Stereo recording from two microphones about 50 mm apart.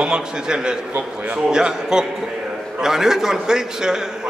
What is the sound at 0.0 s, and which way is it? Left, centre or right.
A man's voice, centre.